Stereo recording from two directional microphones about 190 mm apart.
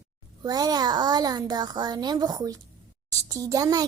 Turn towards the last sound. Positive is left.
turn(degrees=-20)  # may be behind; listen again after turning